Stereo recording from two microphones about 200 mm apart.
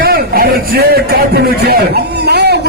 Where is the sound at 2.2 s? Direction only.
55° right (ahead or behind).